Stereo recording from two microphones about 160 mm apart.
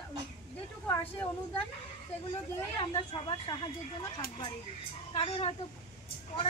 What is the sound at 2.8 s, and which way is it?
Speech, 30° left (ahead or behind).